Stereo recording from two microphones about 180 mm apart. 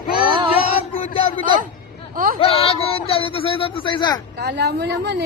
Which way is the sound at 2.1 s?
50° right (ahead or behind).